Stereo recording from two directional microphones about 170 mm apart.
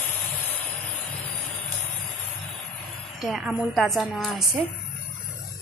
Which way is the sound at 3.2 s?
Centre (ahead or behind).